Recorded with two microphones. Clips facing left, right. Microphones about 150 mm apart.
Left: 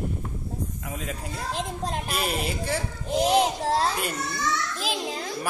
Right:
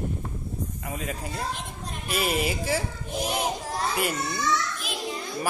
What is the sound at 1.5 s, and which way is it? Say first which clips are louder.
Speech: left 8 dB; 90° left.